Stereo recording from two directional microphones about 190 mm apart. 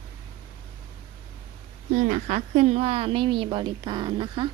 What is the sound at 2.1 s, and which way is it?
Speech, 40° right (ahead or behind).